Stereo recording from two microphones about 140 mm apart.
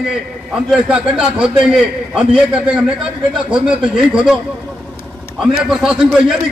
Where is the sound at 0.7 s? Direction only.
5° right (ahead or behind).